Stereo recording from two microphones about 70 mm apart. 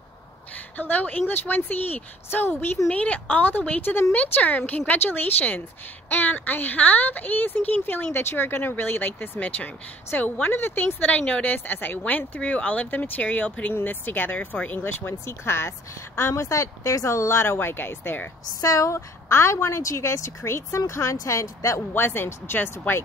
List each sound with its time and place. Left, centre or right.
0.7 s a woman's voice: left
18.6 s a woman's voice: left
18.9 s a woman's voice: left
21.9 s speech: left